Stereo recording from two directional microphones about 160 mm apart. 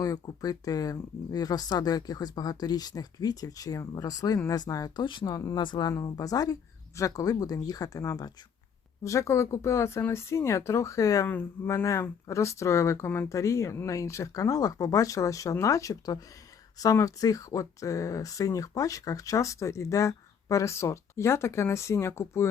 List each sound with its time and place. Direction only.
0.0 s speech: 25° left (ahead or behind)